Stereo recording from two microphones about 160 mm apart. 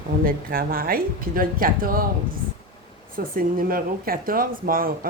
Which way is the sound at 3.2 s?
65° right (ahead or behind).